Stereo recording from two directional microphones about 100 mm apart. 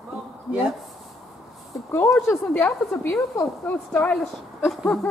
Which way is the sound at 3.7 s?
15° left (ahead or behind).